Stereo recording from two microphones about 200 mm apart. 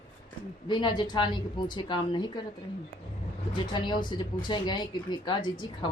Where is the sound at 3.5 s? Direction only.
20° left (ahead or behind).